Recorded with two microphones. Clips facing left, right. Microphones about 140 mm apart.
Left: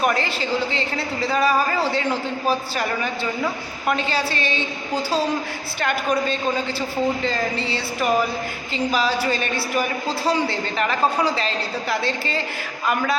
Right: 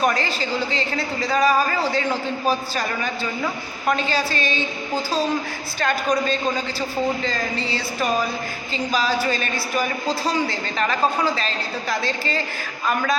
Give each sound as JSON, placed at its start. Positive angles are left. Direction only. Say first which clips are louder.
{"t": 0.7, "sound": "a woman's voice", "louder": "even", "side_deg": 25}
{"t": 3.9, "sound": "a woman's voice", "louder": "even", "side_deg": 30}
{"t": 5.8, "sound": "a woman's voice", "louder": "right 1 dB", "side_deg": 15}